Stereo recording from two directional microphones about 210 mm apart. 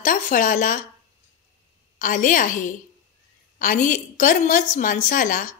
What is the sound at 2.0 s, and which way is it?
A woman's voice, 40° left (ahead or behind).